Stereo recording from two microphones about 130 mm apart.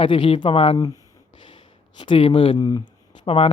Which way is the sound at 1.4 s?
40° left (ahead or behind).